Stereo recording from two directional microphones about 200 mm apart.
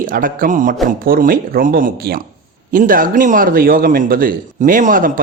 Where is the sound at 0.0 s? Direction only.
45° right (ahead or behind).